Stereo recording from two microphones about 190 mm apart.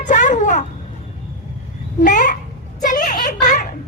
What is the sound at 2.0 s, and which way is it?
Babbling, 40° left (ahead or behind).